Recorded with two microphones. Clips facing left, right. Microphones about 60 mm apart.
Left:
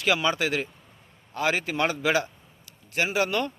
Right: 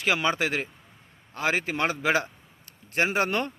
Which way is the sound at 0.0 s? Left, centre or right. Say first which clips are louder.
Left 1 dB; right.